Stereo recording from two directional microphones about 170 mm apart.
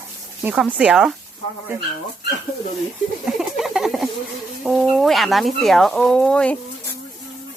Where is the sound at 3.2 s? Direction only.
Centre (ahead or behind).